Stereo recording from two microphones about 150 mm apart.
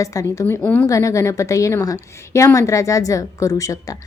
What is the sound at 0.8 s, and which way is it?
A woman's voice, 20° left (ahead or behind).